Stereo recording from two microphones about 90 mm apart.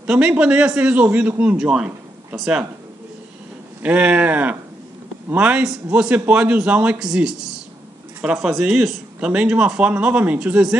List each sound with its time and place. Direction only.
0.0 s a man's voice: 10° right (ahead or behind)
3.8 s a man's voice: 15° right (ahead or behind)